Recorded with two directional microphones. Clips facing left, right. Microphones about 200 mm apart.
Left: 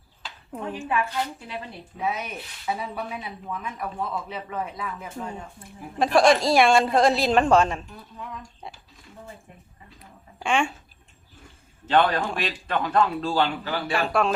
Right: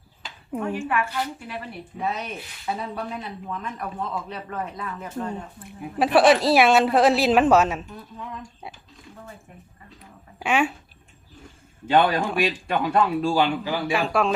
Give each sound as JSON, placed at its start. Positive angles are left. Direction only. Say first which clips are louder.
{"t": 0.5, "sound": "a man's voice", "louder": "right 5 dB", "side_deg": -10}
{"t": 0.9, "sound": "a woman's voice", "louder": "even", "side_deg": 20}
{"t": 2.0, "sound": "speech", "louder": "even", "side_deg": 5}
{"t": 10.4, "sound": "speech", "louder": "right 2 dB", "side_deg": -5}
{"t": 11.9, "sound": "a man's voice", "louder": "right 1 dB", "side_deg": -10}
{"t": 13.9, "sound": "speech", "louder": "even", "side_deg": 0}